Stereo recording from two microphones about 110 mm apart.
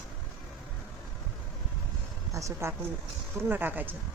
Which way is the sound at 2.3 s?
25° right (ahead or behind).